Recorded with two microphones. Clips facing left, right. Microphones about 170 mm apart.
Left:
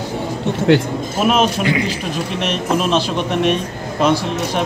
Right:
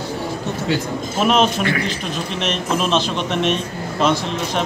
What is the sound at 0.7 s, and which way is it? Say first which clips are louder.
Speech: left 9 dB; 60° left (ahead or behind).